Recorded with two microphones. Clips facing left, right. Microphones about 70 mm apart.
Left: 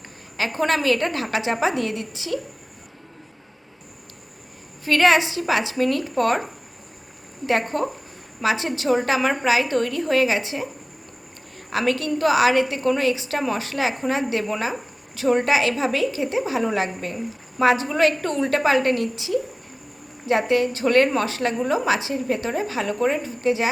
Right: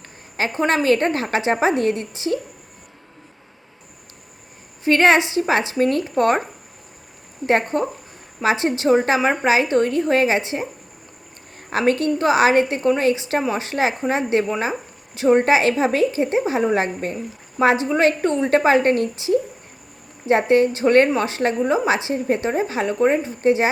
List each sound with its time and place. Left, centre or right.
0.3 s a woman's voice: right
4.9 s speech: right
7.4 s speech: right
11.7 s a woman's voice: right